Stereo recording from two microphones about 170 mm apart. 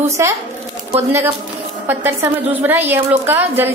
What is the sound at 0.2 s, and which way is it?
A woman's voice, 15° right (ahead or behind).